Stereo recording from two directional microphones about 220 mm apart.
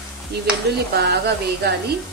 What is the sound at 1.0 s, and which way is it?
Speech, 45° right (ahead or behind).